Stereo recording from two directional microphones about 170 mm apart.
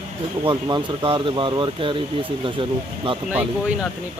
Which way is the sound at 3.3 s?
10° right (ahead or behind).